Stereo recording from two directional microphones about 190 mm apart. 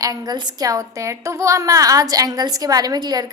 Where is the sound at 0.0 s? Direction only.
20° right (ahead or behind).